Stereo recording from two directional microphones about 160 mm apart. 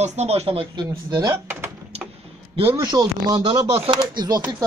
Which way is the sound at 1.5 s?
15° right (ahead or behind).